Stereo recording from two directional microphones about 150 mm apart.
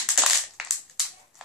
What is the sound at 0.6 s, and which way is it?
Crushing, centre (ahead or behind).